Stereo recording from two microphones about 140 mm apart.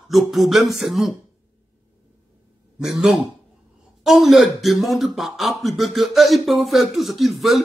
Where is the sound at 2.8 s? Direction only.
5° right (ahead or behind).